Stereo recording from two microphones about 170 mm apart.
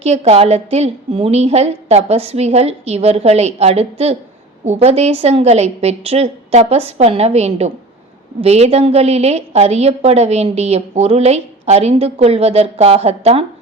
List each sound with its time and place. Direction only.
0.0 s a woman's voice: 40° right (ahead or behind)